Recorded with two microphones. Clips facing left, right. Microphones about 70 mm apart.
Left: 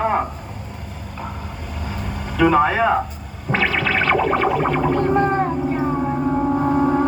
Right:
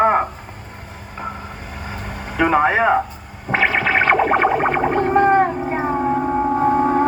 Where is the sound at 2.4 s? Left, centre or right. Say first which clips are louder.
Even; right.